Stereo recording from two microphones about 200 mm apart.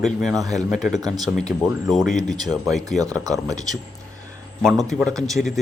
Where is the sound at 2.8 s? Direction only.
20° right (ahead or behind).